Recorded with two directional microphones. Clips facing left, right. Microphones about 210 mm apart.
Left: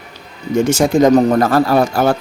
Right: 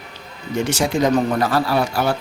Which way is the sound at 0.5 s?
45° left (ahead or behind).